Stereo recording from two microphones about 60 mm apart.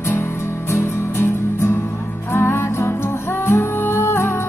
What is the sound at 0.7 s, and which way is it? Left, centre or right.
Music, left.